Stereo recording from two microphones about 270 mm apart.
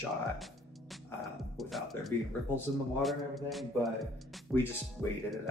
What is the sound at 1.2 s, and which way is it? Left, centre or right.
Speech, centre.